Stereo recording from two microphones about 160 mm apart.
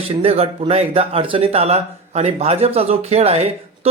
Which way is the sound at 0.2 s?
40° right (ahead or behind).